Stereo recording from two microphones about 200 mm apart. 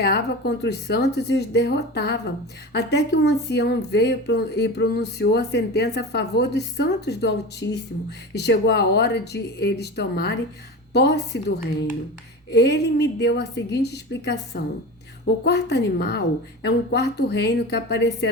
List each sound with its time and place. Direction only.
0.0 s speech: 55° left (ahead or behind)